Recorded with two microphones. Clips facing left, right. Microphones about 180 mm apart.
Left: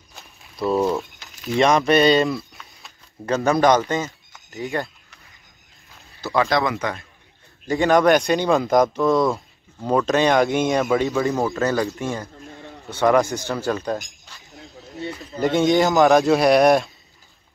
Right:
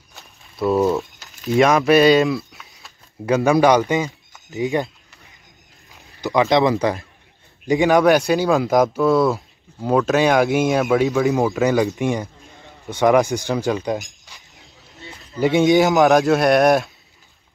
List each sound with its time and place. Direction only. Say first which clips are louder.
0.1 s a sound: even; centre (ahead or behind)
3.4 s speech: right 2 dB; 10° right (ahead or behind)
5.9 s speech: right 3 dB; 15° right (ahead or behind)
7.6 s speech: right 2 dB; 15° right (ahead or behind)
11.6 s speech: right 4 dB; 15° right (ahead or behind)
15.4 s speech: right 3 dB; centre (ahead or behind)